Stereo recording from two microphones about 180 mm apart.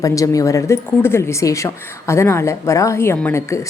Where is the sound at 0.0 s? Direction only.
20° left (ahead or behind).